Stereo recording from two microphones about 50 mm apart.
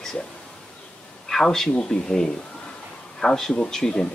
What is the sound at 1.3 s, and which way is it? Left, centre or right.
Speech, centre.